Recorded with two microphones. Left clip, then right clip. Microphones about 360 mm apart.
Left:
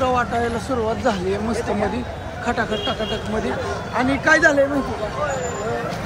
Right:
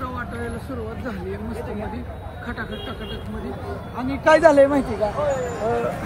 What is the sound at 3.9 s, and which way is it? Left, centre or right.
Speech, centre.